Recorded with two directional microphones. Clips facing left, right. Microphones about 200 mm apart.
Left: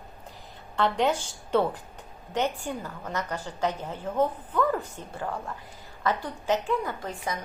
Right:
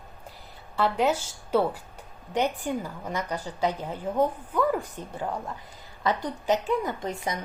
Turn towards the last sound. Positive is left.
turn(degrees=-20)  # may be behind; listen again after turning